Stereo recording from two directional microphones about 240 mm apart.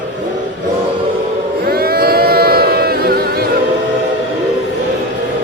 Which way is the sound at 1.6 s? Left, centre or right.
Right.